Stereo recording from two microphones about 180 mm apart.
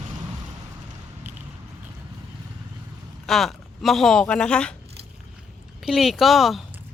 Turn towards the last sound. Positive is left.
turn(degrees=0)  # may be behind; listen again after turning